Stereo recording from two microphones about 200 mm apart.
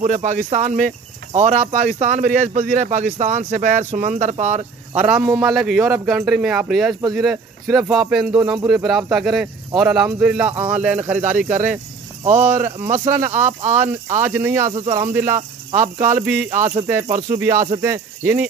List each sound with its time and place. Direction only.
0.0 s speech: 35° right (ahead or behind)
5.0 s speech: 5° right (ahead or behind)
5.9 s speech: 10° right (ahead or behind)
11.1 s speech: 40° right (ahead or behind)
14.2 s speech: 10° right (ahead or behind)
16.5 s speech: 35° right (ahead or behind)
16.8 s speech: 15° right (ahead or behind)